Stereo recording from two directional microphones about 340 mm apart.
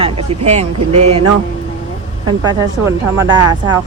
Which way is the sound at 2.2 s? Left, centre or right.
Centre.